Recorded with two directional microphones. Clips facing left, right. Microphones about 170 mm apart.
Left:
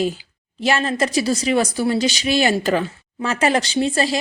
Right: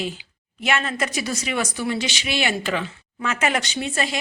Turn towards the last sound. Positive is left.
turn(degrees=35)  # may be behind; listen again after turning